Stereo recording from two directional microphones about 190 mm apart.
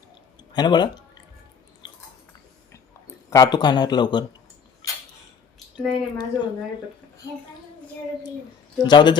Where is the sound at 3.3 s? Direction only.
20° left (ahead or behind).